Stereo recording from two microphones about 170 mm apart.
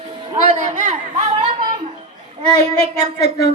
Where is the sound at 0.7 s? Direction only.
45° right (ahead or behind).